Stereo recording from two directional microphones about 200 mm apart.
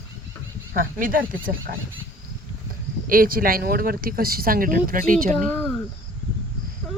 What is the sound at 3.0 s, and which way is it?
Speech, 45° right (ahead or behind).